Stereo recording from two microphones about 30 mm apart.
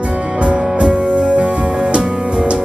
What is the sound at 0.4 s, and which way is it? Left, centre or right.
Music, right.